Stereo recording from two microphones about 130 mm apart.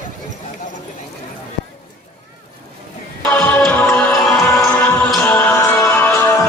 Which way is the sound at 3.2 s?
10° left (ahead or behind).